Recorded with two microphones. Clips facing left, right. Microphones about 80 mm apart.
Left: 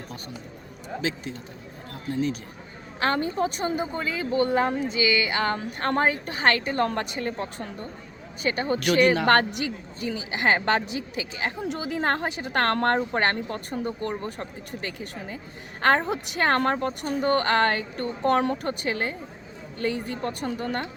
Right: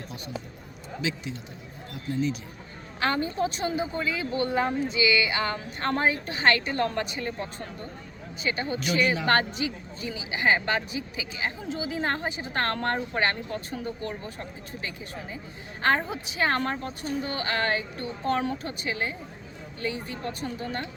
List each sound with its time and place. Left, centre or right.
3.0 s speech: left
6.7 s speech: left
8.4 s a woman's voice: left
14.3 s a woman's voice: left